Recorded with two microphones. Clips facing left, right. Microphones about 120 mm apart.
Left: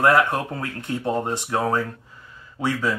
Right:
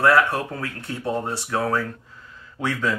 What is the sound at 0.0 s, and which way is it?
Speech, 15° left (ahead or behind).